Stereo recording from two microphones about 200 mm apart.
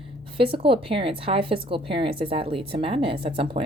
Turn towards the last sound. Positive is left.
turn(degrees=-25)  # may be behind; listen again after turning